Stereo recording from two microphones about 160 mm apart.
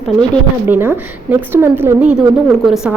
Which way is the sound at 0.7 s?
15° right (ahead or behind).